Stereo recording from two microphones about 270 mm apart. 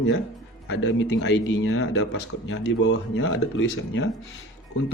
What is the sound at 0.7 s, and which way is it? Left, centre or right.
Speech, left.